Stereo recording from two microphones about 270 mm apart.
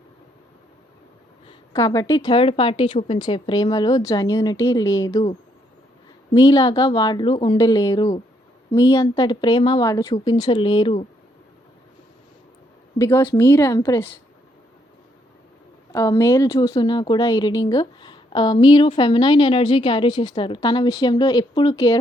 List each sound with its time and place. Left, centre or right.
1.5 s a woman's voice: centre
6.3 s a woman's voice: centre
13.0 s a woman's voice: centre
15.9 s a woman's voice: centre